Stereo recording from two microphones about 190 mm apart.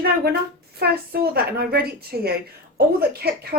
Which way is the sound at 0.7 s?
55° right (ahead or behind).